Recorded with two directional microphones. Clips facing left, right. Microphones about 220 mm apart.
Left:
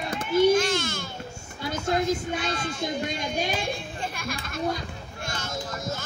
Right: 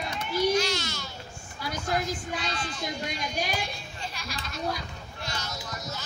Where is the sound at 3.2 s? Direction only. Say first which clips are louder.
Left 3 dB; 25° left (ahead or behind).